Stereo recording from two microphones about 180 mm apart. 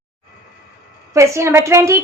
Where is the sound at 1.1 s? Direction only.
15° right (ahead or behind).